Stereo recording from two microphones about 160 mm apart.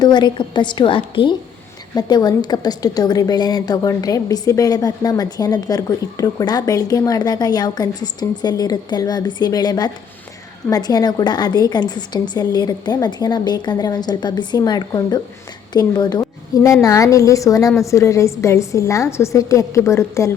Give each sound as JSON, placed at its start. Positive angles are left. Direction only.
{"t": 0.0, "sound": "a woman's voice", "side_deg": 25}